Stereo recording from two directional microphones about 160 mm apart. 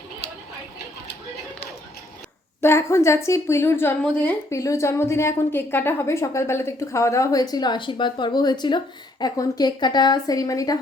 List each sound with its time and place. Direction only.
2.6 s a woman's voice: 15° left (ahead or behind)